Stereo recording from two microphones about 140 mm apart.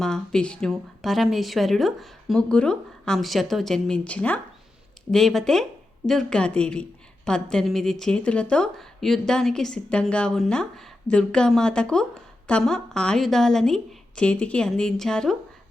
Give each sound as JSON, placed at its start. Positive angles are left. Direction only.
{"t": 0.0, "sound": "a woman's voice", "side_deg": 5}